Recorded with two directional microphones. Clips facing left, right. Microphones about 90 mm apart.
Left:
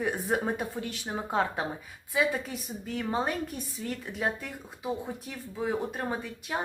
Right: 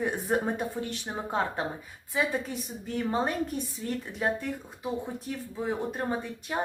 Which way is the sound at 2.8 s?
Centre (ahead or behind).